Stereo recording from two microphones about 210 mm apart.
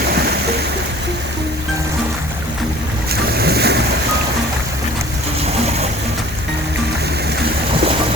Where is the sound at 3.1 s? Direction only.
50° right (ahead or behind).